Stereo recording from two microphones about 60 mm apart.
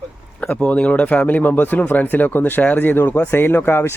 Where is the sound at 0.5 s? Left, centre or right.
Centre.